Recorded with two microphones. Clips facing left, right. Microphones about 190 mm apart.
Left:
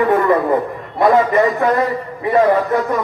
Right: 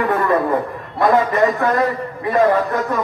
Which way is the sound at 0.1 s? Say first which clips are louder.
Left 3 dB; 20° left (ahead or behind).